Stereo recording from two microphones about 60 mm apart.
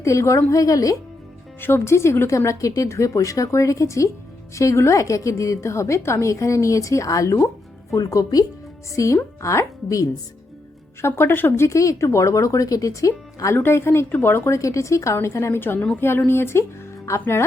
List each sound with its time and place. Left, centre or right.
0.0 s a woman's voice: left
0.5 s speech: left
1.6 s a woman's voice: left
2.3 s a woman's voice: left
9.4 s a woman's voice: left
11.0 s a woman's voice: left
13.6 s a woman's voice: left